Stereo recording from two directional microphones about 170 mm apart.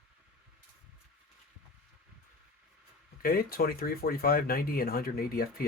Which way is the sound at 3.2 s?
60° left (ahead or behind).